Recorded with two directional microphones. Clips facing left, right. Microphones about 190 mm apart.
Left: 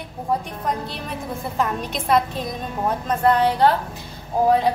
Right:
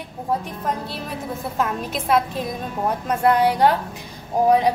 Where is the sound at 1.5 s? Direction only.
Centre (ahead or behind).